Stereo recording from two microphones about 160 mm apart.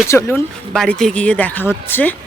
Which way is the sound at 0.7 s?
Centre (ahead or behind).